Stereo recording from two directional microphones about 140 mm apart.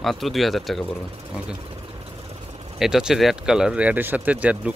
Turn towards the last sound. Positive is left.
turn(degrees=-10)  # may be behind; listen again after turning